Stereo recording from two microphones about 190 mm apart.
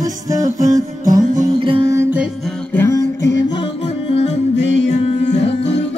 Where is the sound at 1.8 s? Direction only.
15° right (ahead or behind).